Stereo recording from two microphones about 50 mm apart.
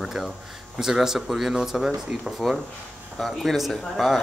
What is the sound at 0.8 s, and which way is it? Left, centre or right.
Speech, centre.